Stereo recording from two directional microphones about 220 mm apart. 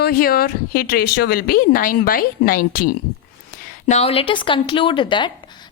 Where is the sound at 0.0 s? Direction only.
40° left (ahead or behind).